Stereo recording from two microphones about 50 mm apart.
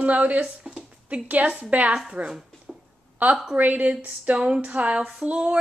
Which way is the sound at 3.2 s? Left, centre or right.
Right.